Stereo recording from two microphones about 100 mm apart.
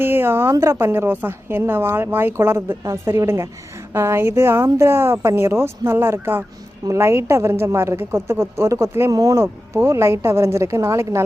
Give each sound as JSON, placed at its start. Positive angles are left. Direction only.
{"t": 0.0, "sound": "a woman's voice", "side_deg": -25}